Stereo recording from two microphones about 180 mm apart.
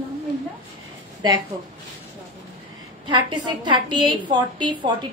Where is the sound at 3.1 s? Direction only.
25° right (ahead or behind).